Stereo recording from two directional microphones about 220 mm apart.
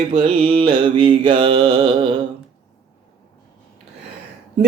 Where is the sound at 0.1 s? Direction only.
25° right (ahead or behind).